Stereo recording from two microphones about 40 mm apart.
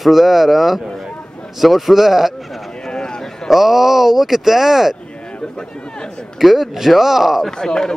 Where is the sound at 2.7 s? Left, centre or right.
Centre.